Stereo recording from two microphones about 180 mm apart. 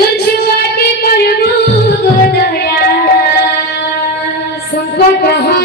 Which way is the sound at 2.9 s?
60° left (ahead or behind).